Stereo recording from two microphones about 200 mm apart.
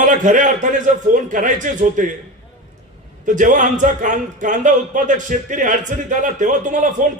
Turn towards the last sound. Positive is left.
turn(degrees=-40)  # may be behind; listen again after turning